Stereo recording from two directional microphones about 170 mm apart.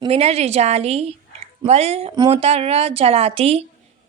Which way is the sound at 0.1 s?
40° right (ahead or behind).